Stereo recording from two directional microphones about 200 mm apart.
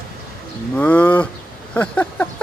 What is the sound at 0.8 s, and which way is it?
Speech, 10° left (ahead or behind).